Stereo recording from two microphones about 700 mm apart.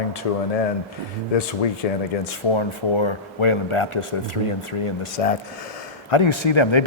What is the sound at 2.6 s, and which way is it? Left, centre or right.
Speech, left.